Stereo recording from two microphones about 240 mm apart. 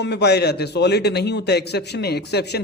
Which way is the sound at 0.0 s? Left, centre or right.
Left.